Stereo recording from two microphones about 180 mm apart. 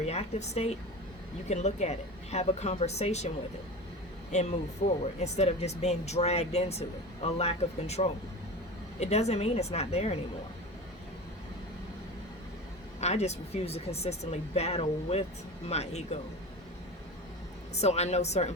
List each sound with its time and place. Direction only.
0.0 s speech: 35° left (ahead or behind)
13.0 s speech: 40° left (ahead or behind)
17.7 s speech: 35° left (ahead or behind)